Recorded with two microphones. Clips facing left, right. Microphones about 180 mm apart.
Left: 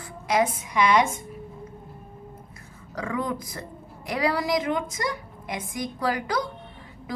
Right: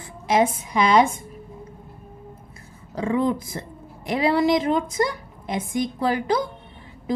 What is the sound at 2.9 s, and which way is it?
A woman's voice, 25° right (ahead or behind).